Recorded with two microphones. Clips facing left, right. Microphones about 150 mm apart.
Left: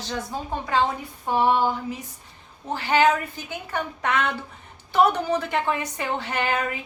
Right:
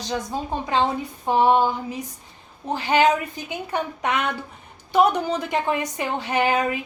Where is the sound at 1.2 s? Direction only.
20° right (ahead or behind).